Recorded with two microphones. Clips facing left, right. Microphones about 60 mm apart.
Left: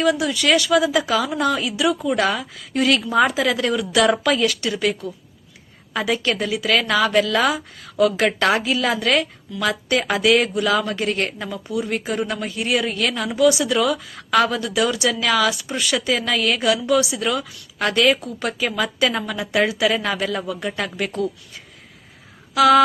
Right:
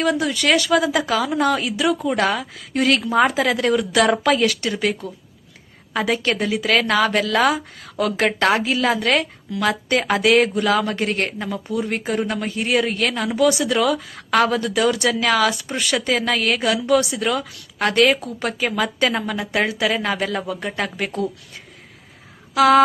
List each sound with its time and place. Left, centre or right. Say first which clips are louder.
0.0 s speech: left 1 dB; right
22.5 s speech: even; right